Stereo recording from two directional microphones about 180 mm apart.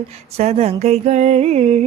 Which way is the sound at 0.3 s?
35° right (ahead or behind).